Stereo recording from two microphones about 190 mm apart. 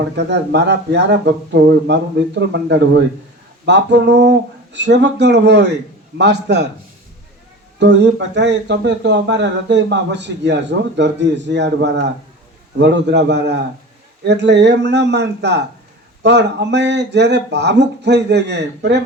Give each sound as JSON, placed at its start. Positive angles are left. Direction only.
{"t": 0.2, "sound": "speech", "side_deg": -65}
{"t": 7.8, "sound": "speech", "side_deg": -65}